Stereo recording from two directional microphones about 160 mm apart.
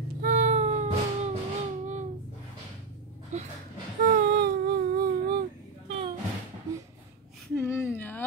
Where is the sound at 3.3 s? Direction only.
45° right (ahead or behind).